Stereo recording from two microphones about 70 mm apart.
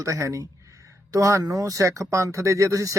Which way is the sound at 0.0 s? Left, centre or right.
Right.